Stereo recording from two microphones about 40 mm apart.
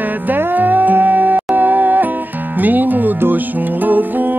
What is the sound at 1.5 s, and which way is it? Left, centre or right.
Speech, right.